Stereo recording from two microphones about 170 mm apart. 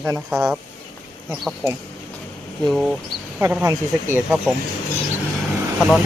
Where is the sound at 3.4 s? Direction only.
15° right (ahead or behind).